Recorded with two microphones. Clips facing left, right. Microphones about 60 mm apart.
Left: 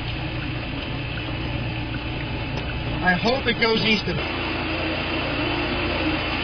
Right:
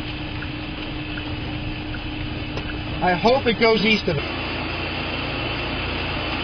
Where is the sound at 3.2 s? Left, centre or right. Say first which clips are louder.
Right 4 dB; right.